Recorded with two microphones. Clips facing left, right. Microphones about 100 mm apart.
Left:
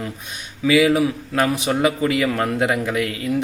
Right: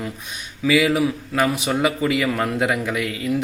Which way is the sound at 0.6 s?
25° left (ahead or behind).